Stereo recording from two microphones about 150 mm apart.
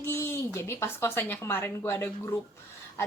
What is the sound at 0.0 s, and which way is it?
Speech, 15° left (ahead or behind).